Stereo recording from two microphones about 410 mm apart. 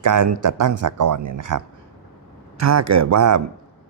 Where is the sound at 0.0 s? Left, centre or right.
Right.